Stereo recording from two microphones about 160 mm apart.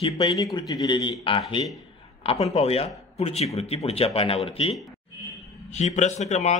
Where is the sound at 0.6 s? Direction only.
25° left (ahead or behind).